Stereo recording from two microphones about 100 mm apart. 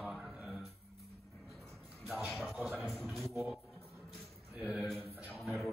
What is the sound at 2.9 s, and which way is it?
Mantra, centre (ahead or behind).